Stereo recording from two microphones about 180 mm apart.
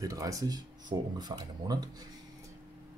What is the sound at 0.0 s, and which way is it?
Speech, 20° right (ahead or behind).